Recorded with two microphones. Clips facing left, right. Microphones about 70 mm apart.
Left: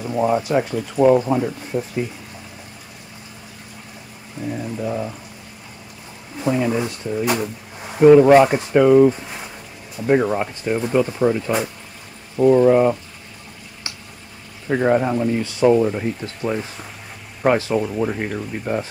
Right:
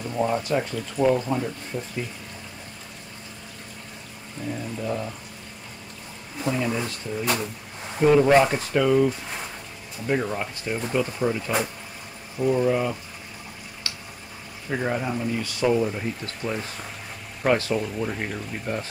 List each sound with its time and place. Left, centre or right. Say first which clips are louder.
0.0 s speech: left 6 dB; centre
4.5 s speech: left 5 dB; centre
4.8 s speech: left 4 dB; centre
6.4 s speech: left 6 dB; centre
7.4 s a sound: left 4 dB; centre
8.3 s speech: left 6 dB; centre
12.4 s speech: left 9 dB; left
13.9 s boiling: left 2 dB; left
14.7 s speech: left 9 dB; left